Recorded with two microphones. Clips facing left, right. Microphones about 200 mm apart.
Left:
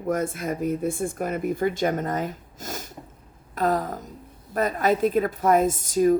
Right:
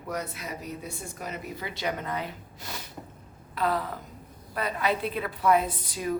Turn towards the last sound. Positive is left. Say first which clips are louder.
# left 11 dB
turn(degrees=45)  # may be behind; listen again after turning